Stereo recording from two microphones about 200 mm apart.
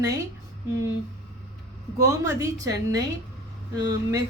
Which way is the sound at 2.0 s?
15° right (ahead or behind).